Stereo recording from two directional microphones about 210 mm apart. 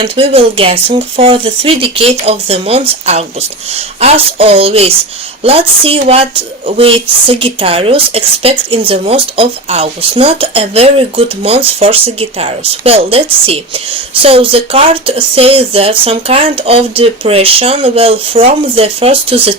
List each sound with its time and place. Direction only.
0.0 s speech: 25° right (ahead or behind)